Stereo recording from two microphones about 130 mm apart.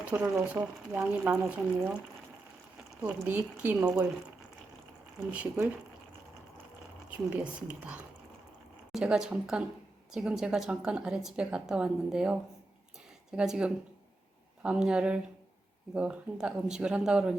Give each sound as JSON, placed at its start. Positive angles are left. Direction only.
{"t": 0.0, "sound": "speech", "side_deg": -10}
{"t": 3.1, "sound": "speech", "side_deg": -15}
{"t": 5.3, "sound": "speech", "side_deg": -10}
{"t": 7.1, "sound": "speech", "side_deg": -10}